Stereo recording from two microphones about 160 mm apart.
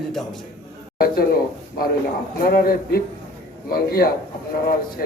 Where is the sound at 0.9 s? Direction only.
65° left (ahead or behind).